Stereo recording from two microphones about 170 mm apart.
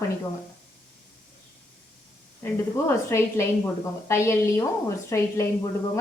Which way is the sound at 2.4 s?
15° left (ahead or behind).